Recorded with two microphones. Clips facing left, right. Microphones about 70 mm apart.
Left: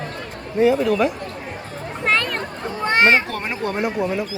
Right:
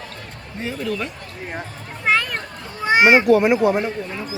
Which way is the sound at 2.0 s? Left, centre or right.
Centre.